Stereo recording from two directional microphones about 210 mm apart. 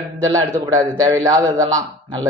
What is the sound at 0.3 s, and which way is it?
A man's voice, 15° right (ahead or behind).